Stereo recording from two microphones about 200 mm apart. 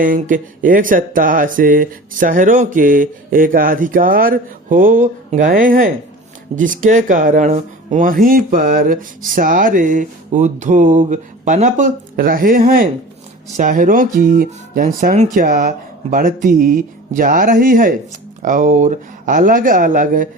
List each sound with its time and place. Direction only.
0.0 s speech: 40° right (ahead or behind)